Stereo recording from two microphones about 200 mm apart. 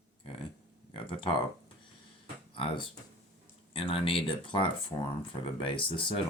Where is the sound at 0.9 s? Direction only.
25° left (ahead or behind).